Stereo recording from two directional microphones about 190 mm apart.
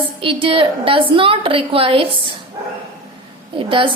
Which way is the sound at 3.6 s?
30° right (ahead or behind).